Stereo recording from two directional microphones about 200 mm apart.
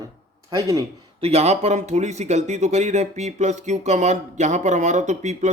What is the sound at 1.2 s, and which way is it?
Speech, 30° right (ahead or behind).